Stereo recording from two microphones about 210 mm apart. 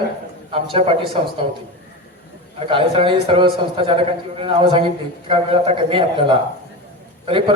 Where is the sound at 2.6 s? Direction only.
25° right (ahead or behind).